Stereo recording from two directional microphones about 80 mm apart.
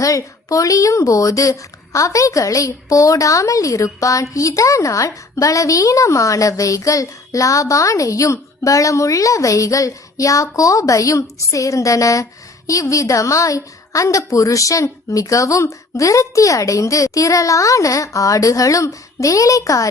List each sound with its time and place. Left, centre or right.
0.0 s speech: left